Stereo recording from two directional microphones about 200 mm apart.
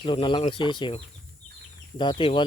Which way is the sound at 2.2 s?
25° left (ahead or behind).